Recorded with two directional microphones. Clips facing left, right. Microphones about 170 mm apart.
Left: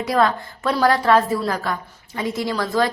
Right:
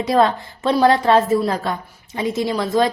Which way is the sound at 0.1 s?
25° right (ahead or behind).